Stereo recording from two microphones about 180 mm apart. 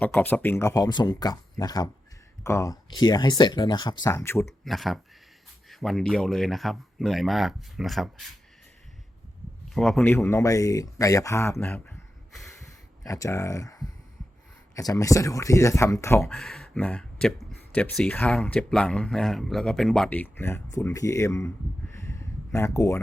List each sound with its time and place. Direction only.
0.0 s speech: 10° left (ahead or behind)
4.4 s speech: centre (ahead or behind)
9.7 s speech: centre (ahead or behind)
10.1 s speech: 15° left (ahead or behind)
13.1 s speech: 15° left (ahead or behind)
16.3 s speech: 5° left (ahead or behind)
22.5 s speech: 15° left (ahead or behind)